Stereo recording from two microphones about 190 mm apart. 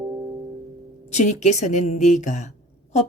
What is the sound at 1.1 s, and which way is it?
A woman's voice, 35° left (ahead or behind).